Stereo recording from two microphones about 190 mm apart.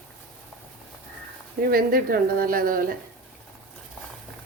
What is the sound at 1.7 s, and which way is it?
Speech, 50° right (ahead or behind).